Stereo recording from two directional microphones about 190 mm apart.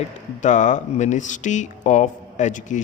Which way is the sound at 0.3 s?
40° left (ahead or behind).